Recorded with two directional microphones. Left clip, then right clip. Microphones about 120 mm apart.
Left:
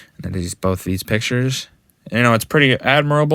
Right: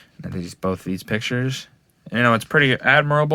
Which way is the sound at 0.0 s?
40° left (ahead or behind).